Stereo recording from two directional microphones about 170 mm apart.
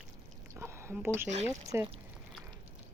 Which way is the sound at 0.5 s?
15° right (ahead or behind).